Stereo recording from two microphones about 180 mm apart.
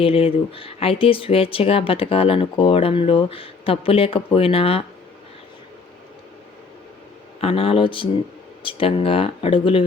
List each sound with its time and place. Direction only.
0.0 s speech: 30° left (ahead or behind)
7.4 s speech: 30° left (ahead or behind)